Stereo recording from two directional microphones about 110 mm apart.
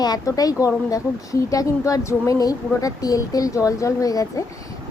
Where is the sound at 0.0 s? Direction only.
35° left (ahead or behind).